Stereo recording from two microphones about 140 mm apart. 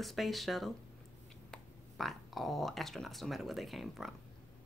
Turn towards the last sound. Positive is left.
turn(degrees=0)  # may be behind; listen again after turning